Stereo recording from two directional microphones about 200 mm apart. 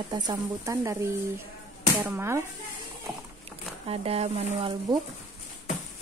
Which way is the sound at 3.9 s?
30° right (ahead or behind).